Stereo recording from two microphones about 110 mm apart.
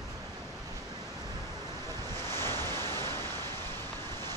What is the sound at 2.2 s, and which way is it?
Waves, 20° left (ahead or behind).